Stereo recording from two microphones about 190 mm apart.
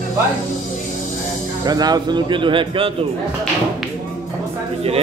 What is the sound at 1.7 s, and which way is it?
Speech, 20° right (ahead or behind).